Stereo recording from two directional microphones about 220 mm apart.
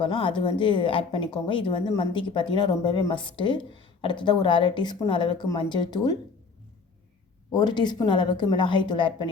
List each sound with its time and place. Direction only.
0.0 s a woman's voice: 20° left (ahead or behind)
7.5 s a woman's voice: 20° left (ahead or behind)